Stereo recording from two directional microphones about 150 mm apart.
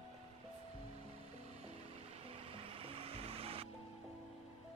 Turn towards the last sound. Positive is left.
turn(degrees=-40)  # may be behind; listen again after turning